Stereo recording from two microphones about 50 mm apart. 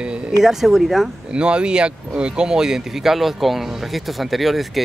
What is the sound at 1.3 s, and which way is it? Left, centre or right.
Speech, centre.